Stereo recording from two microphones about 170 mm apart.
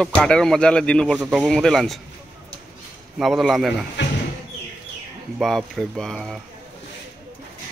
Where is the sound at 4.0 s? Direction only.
90° left.